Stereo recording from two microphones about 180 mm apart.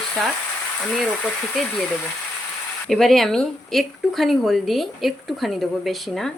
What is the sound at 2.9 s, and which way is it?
Speech, centre (ahead or behind).